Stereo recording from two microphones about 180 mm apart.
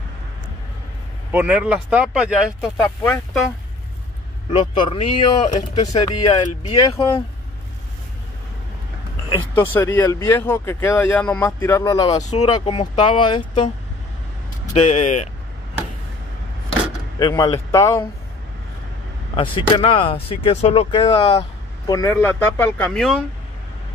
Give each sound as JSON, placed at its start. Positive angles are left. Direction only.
{"t": 1.3, "sound": "speech", "side_deg": -5}
{"t": 4.5, "sound": "speech", "side_deg": 30}
{"t": 9.6, "sound": "speech", "side_deg": 15}
{"t": 14.7, "sound": "speech", "side_deg": 40}
{"t": 17.2, "sound": "speech", "side_deg": 20}
{"t": 19.3, "sound": "speech", "side_deg": 30}